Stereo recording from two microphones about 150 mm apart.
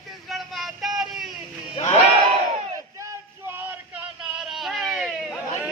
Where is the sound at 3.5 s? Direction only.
10° right (ahead or behind).